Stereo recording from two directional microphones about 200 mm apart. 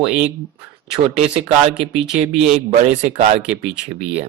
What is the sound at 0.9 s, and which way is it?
Speech, 30° right (ahead or behind).